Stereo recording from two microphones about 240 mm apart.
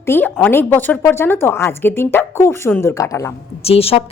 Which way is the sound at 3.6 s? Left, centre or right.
Left.